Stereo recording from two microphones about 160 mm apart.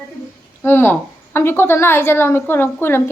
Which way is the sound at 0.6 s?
15° left (ahead or behind).